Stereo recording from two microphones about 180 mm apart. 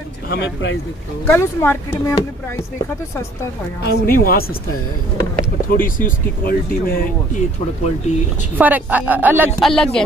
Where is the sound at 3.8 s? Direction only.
55° left (ahead or behind).